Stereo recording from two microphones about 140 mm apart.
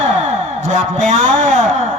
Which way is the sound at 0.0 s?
55° right (ahead or behind).